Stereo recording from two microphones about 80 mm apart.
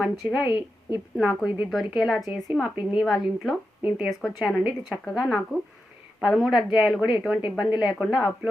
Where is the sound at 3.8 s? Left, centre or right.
Centre.